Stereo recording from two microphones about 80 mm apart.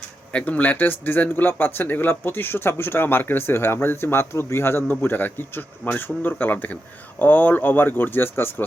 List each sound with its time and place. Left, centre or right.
0.3 s speech: centre